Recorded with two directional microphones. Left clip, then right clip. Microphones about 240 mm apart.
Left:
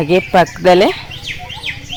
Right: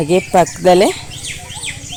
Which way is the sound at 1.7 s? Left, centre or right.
Right.